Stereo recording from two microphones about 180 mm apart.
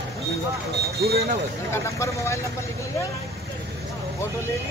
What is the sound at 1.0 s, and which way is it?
Speech, 65° right (ahead or behind).